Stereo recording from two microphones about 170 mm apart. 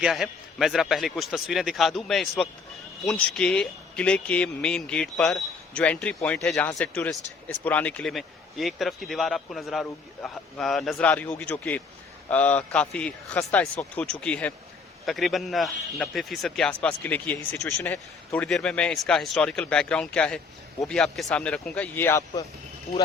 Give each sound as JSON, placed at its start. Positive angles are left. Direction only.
{"t": 0.0, "sound": "a man's voice", "side_deg": 0}